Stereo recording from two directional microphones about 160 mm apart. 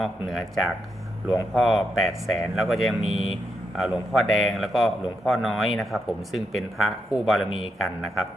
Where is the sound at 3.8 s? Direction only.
Centre (ahead or behind).